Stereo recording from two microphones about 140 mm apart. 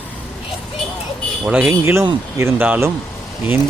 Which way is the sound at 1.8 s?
20° right (ahead or behind).